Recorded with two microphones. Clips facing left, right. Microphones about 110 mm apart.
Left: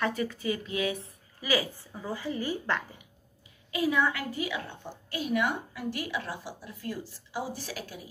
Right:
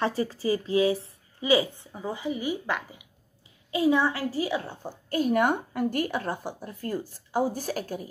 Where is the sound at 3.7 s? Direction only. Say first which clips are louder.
Right 4 dB; 30° right (ahead or behind).